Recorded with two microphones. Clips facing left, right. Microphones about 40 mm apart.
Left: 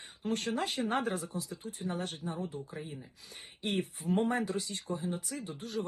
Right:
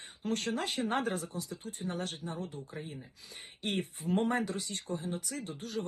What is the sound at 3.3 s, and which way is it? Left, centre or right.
Speech, right.